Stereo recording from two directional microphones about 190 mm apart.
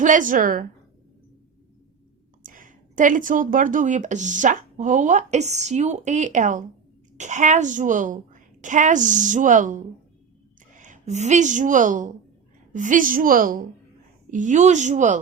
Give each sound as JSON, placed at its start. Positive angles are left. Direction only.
{"t": 0.0, "sound": "a woman's voice", "side_deg": -45}
{"t": 2.4, "sound": "a woman's voice", "side_deg": -45}